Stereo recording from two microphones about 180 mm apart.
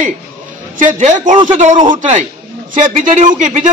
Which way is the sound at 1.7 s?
25° right (ahead or behind).